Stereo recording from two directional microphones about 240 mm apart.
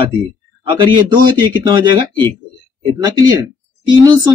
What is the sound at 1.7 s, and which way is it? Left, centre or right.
Speech, centre.